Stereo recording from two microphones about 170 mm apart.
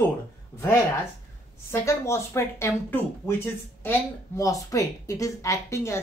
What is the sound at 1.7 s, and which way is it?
Speech, 15° left (ahead or behind).